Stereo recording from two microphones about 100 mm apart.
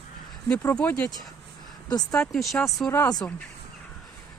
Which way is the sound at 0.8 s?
15° left (ahead or behind).